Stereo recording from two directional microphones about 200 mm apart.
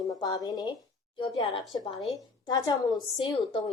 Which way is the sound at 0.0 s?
20° left (ahead or behind).